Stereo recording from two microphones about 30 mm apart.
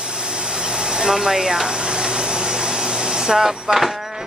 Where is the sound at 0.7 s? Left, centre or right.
Right.